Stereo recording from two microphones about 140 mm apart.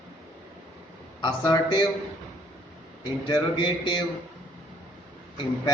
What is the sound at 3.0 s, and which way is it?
A man's voice, 35° left (ahead or behind).